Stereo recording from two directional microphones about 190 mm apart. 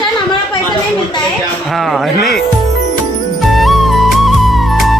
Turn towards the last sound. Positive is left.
turn(degrees=0)  # may be behind; listen again after turning